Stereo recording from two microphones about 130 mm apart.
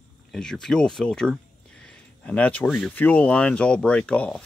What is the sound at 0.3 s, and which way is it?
Speech, 5° left (ahead or behind).